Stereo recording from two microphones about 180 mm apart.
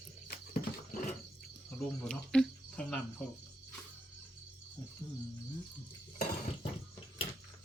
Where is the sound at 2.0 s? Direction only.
5° left (ahead or behind).